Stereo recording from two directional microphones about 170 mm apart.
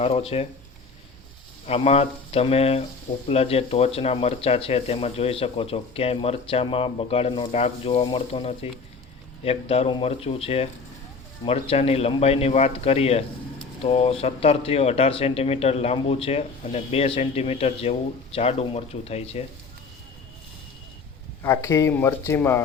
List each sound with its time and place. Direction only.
0.0 s speech: 35° left (ahead or behind)
1.6 s speech: 35° left (ahead or behind)
21.4 s speech: 15° left (ahead or behind)